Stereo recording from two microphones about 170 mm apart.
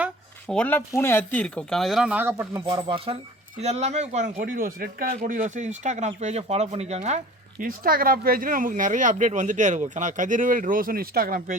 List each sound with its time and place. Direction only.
0.4 s speech: 5° left (ahead or behind); by 7.2 s 40° right (ahead or behind)
7.6 s speech: 60° right (ahead or behind)